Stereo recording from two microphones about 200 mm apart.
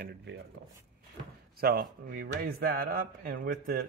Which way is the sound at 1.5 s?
50° right (ahead or behind).